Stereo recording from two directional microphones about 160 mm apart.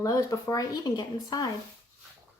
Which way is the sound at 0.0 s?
20° left (ahead or behind).